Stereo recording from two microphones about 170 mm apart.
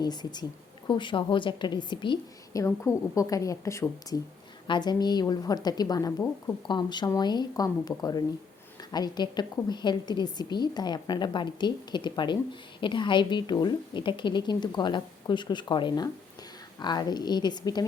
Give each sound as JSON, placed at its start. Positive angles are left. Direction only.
{"t": 0.0, "sound": "a woman's voice", "side_deg": 25}